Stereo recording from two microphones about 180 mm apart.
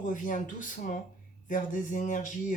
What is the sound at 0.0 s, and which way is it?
Speech, 45° left (ahead or behind).